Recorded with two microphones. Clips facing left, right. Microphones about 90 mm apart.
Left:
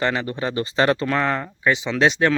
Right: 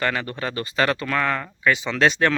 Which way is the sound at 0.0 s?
20° left (ahead or behind).